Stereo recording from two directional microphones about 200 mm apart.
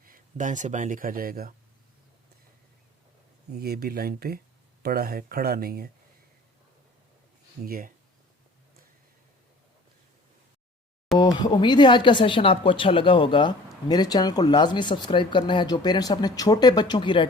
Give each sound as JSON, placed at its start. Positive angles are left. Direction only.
{"t": 0.0, "sound": "speech", "side_deg": -40}
{"t": 3.6, "sound": "speech", "side_deg": -50}
{"t": 7.6, "sound": "speech", "side_deg": -45}
{"t": 11.2, "sound": "speech", "side_deg": 20}